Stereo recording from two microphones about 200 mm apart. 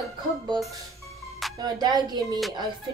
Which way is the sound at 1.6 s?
20° right (ahead or behind).